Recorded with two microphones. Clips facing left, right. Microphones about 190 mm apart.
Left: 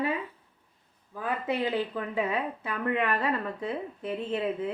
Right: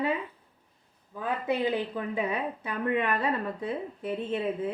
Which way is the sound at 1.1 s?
20° right (ahead or behind).